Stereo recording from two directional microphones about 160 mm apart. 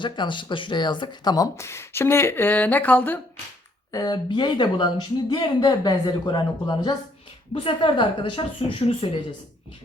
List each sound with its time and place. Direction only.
0.0 s speech: 30° left (ahead or behind); by 3.2 s 10° left (ahead or behind)
3.9 s speech: 25° left (ahead or behind)